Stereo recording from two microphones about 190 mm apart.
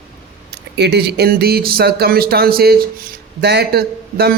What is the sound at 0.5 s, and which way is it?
A man's voice, 60° right (ahead or behind).